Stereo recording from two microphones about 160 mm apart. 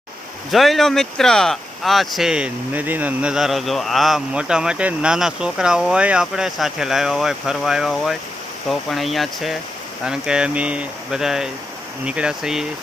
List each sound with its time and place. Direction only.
0.5 s speech: centre (ahead or behind)